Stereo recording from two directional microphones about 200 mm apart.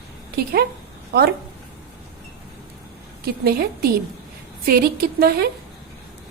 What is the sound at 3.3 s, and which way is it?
A woman's voice, 50° right (ahead or behind).